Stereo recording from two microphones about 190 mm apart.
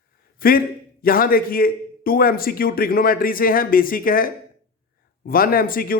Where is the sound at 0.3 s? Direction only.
50° left (ahead or behind).